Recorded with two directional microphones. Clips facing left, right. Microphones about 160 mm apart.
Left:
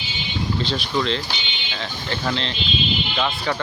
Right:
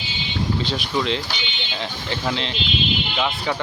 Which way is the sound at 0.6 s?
15° right (ahead or behind).